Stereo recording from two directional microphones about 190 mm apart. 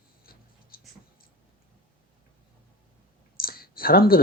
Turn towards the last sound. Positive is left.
turn(degrees=50)  # may be behind; listen again after turning